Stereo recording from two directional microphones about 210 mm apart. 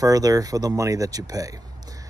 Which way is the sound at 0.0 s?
15° right (ahead or behind).